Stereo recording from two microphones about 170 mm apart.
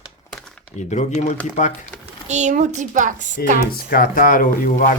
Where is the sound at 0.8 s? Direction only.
40° left (ahead or behind).